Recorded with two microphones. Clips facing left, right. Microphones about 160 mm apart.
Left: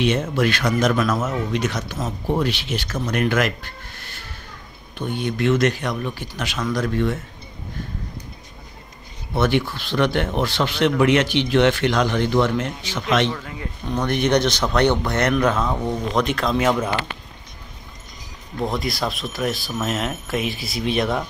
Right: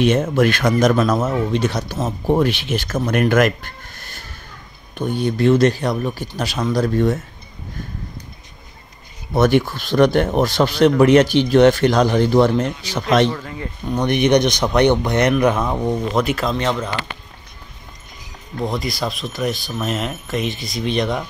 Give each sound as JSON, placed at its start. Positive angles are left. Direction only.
{"t": 0.0, "sound": "speech", "side_deg": -45}
{"t": 9.3, "sound": "speech", "side_deg": -45}
{"t": 13.3, "sound": "speech", "side_deg": 0}
{"t": 13.8, "sound": "speech", "side_deg": -15}
{"t": 16.1, "sound": "speech", "side_deg": -5}
{"t": 16.5, "sound": "speech", "side_deg": 10}
{"t": 18.6, "sound": "speech", "side_deg": 0}